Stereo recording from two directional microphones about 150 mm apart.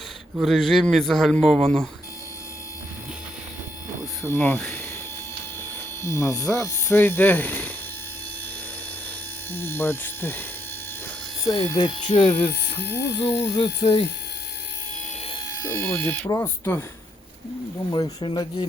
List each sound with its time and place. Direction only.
0.3 s a man's voice: centre (ahead or behind)
4.2 s speech: 15° left (ahead or behind)
6.0 s speech: 20° left (ahead or behind)
9.5 s speech: 15° left (ahead or behind)
11.4 s speech: 25° left (ahead or behind)
12.8 s speech: 90° left
13.5 s speech: 30° left (ahead or behind)
15.6 s speech: 15° left (ahead or behind)
17.9 s speech: 30° left (ahead or behind)